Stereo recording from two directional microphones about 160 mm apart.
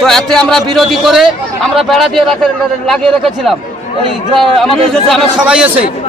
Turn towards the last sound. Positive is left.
turn(degrees=-5)  # may be behind; listen again after turning